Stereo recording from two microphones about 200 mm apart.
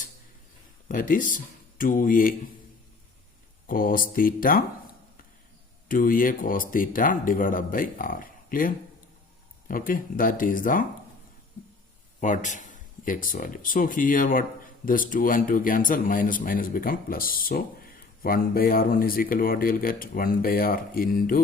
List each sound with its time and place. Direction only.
0.9 s speech: 45° left (ahead or behind)
3.7 s speech: 45° left (ahead or behind)
5.9 s speech: 45° left (ahead or behind)
12.2 s speech: 40° left (ahead or behind)